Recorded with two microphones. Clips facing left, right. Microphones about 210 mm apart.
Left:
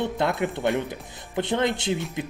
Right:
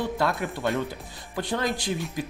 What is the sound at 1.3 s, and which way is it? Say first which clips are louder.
Speech: left 4 dB; 20° left (ahead or behind).